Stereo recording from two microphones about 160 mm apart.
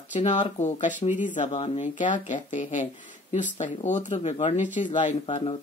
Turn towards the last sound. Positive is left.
turn(degrees=35)  # may be behind; listen again after turning